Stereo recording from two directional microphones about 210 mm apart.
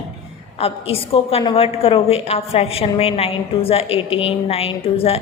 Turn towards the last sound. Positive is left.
turn(degrees=30)  # may be behind; listen again after turning